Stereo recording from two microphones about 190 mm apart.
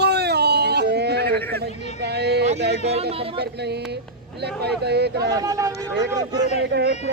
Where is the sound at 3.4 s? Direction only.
60° right (ahead or behind).